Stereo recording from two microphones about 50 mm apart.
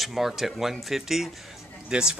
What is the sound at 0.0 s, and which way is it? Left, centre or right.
Speech, centre.